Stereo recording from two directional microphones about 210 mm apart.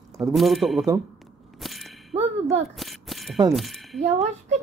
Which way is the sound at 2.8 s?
Centre (ahead or behind).